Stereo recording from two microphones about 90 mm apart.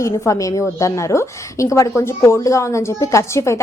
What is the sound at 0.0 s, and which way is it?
A woman's voice, 35° left (ahead or behind).